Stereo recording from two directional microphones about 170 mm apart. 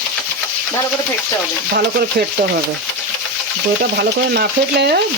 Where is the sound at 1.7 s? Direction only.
70° right (ahead or behind).